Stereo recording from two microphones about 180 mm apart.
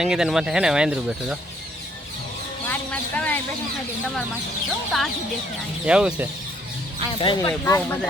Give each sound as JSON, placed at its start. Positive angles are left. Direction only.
{"t": 0.0, "sound": "speech", "side_deg": -5}
{"t": 2.6, "sound": "a sound", "side_deg": 10}
{"t": 4.9, "sound": "speech", "side_deg": 0}
{"t": 7.2, "sound": "speech", "side_deg": 25}
{"t": 7.6, "sound": "speech", "side_deg": 10}